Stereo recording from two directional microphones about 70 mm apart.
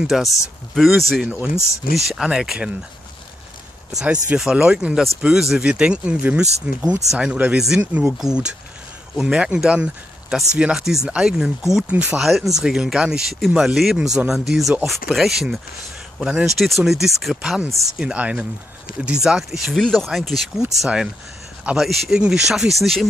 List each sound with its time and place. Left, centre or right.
0.0 s speech: centre
1.2 s speech: right
2.0 s speech: centre
3.9 s speech: centre
7.8 s speech: right
8.2 s speech: centre
11.9 s speech: centre
12.2 s speech: centre
16.5 s speech: centre
17.4 s speech: centre
19.8 s speech: centre